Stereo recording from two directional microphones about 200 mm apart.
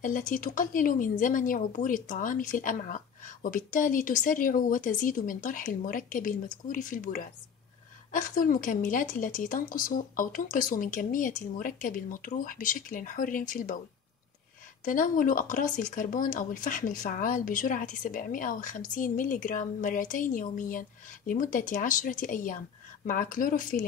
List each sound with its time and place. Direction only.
0.0 s speech: 40° left (ahead or behind)
14.9 s speech: 40° left (ahead or behind)